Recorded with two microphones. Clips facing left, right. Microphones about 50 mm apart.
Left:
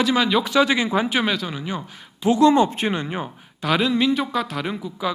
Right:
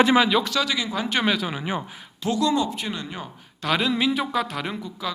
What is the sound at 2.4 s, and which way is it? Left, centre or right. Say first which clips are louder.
Speech: left 8 dB; left.